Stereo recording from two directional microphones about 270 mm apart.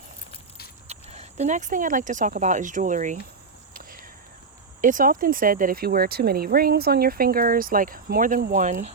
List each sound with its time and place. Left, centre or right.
0.9 s speech: right
3.8 s a sound: right
4.8 s speech: right